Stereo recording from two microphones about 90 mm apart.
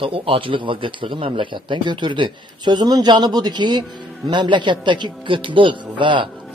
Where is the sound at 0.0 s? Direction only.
85° right.